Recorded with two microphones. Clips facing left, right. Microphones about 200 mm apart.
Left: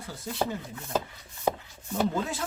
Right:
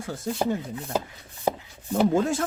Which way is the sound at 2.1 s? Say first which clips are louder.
Right 8 dB; 50° right (ahead or behind).